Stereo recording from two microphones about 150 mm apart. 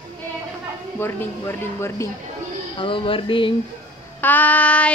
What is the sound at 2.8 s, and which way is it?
Speech, 35° left (ahead or behind).